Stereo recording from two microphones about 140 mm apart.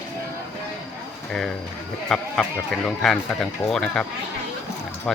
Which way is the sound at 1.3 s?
5° left (ahead or behind).